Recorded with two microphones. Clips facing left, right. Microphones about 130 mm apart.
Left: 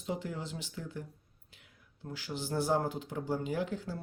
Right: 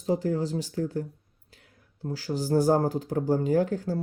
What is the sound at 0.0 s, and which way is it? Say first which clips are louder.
Speech: right 11 dB; 40° right (ahead or behind).